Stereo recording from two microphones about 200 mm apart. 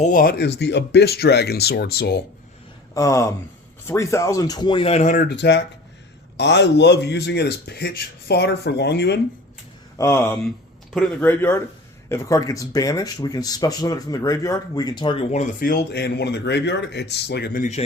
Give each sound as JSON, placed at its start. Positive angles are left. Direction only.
{"t": 0.0, "sound": "speech", "side_deg": 45}
{"t": 2.9, "sound": "speech", "side_deg": 15}
{"t": 5.1, "sound": "speech", "side_deg": 50}
{"t": 10.0, "sound": "speech", "side_deg": 10}